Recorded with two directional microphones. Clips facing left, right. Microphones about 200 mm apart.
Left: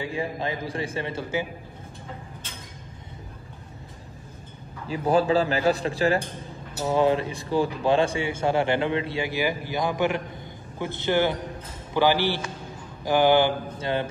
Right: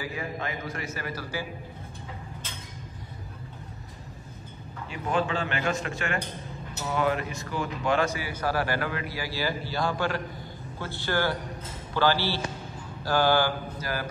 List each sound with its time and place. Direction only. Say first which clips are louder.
0.0 s speech: left 5 dB; 30° left (ahead or behind)
4.8 s a man's voice: left 7 dB; 35° left (ahead or behind)